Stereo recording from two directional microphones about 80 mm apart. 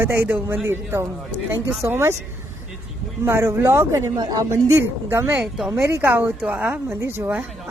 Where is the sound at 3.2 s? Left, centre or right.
Right.